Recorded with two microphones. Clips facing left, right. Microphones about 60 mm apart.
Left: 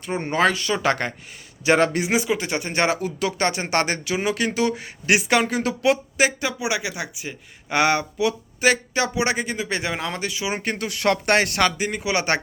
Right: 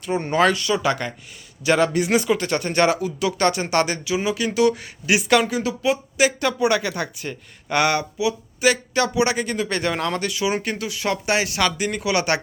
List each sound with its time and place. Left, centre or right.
0.0 s speech: left
2.0 s speech: centre; by 5.7 s left
6.4 s speech: centre
7.7 s speech: left
10.7 s speech: left
11.8 s speech: left